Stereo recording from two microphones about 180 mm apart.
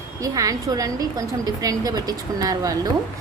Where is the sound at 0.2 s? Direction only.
20° right (ahead or behind).